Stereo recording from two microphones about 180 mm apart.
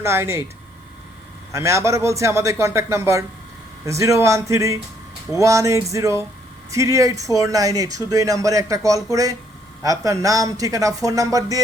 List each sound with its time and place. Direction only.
0.0 s a man's voice: 15° right (ahead or behind)
1.5 s a man's voice: 15° right (ahead or behind)